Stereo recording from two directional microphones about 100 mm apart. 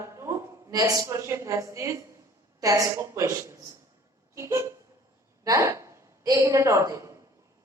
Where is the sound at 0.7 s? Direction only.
35° right (ahead or behind).